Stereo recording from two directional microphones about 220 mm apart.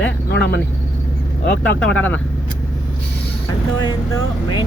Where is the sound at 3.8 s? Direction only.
20° left (ahead or behind).